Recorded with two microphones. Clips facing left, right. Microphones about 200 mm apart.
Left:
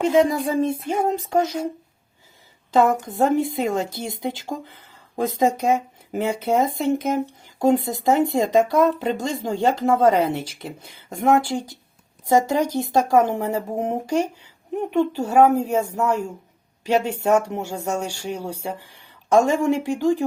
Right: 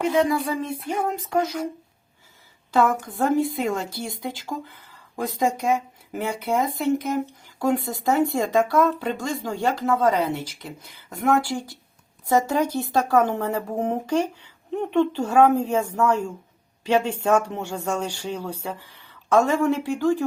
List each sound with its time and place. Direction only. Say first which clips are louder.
0.0 s speech: left 3 dB; 25° left (ahead or behind)
2.9 s speech: left 2 dB; 20° left (ahead or behind)